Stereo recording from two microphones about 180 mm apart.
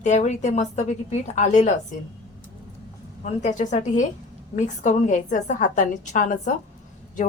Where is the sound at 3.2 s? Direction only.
40° left (ahead or behind).